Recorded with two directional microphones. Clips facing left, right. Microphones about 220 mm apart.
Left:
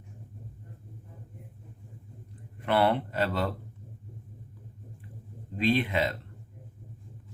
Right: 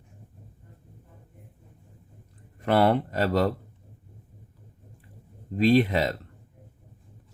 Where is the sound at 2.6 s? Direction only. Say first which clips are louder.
Right 4 dB; 40° right (ahead or behind).